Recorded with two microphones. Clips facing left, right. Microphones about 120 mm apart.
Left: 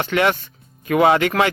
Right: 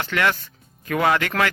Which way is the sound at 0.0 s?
20° left (ahead or behind).